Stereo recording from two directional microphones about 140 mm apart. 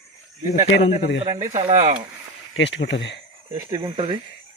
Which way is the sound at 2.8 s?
50° left (ahead or behind).